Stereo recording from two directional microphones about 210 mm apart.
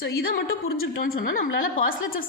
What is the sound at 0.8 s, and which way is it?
Speech, 45° left (ahead or behind).